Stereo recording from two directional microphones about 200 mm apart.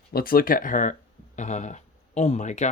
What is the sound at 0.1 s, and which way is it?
Speech, 50° left (ahead or behind).